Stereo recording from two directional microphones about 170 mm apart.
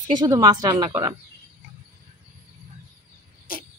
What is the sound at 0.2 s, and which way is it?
Speech, 20° right (ahead or behind).